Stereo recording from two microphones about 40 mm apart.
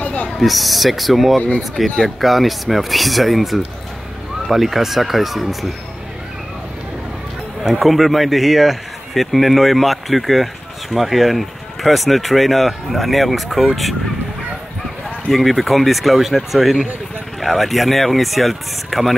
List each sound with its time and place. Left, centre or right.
0.0 s a sound: left
0.4 s speech: centre
7.6 s speech: centre
15.3 s speech: centre